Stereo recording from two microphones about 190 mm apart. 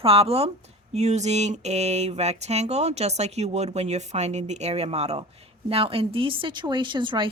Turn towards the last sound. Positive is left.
turn(degrees=-25)  # may be behind; listen again after turning